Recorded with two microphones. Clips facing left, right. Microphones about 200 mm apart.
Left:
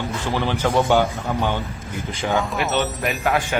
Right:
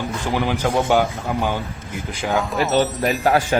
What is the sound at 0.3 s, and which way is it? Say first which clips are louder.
A man's voice: right 1 dB; 15° right (ahead or behind).